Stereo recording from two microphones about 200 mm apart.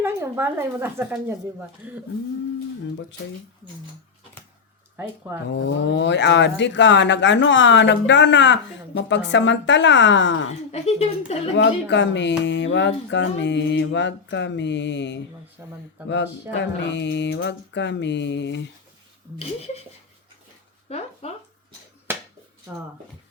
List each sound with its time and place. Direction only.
0.0 s speech: 10° right (ahead or behind)
5.5 s speech: 65° left (ahead or behind)
10.7 s a woman's voice: 30° left (ahead or behind)
11.5 s speech: 65° left (ahead or behind)
15.6 s speech: 10° right (ahead or behind)
16.0 s speech: 65° left (ahead or behind)
19.4 s a woman's voice: 30° left (ahead or behind)
20.9 s speech: 30° left (ahead or behind)
22.1 s finger snapping: 10° right (ahead or behind)